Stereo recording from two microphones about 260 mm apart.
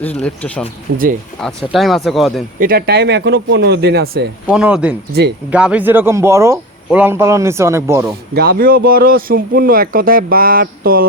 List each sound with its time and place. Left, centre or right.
0.0 s speech: centre
0.9 s speech: right
1.4 s speech: centre
2.6 s speech: right
4.4 s speech: centre
8.3 s speech: right